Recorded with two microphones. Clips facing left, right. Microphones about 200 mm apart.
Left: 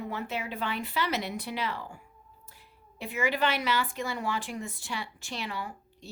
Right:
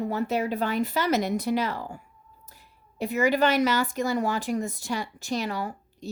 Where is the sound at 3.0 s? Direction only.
40° right (ahead or behind).